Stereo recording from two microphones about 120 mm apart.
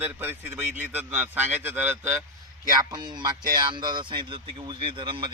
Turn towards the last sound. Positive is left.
turn(degrees=-45)  # may be behind; listen again after turning